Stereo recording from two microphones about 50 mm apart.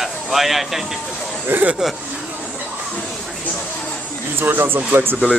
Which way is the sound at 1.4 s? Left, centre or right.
Right.